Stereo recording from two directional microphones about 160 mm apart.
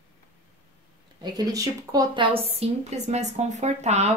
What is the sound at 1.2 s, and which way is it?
A woman's voice, 25° right (ahead or behind).